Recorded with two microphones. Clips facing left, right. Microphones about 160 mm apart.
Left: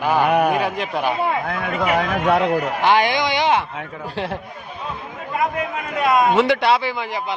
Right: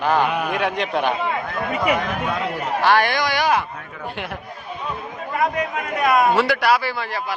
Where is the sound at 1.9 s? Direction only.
70° left (ahead or behind).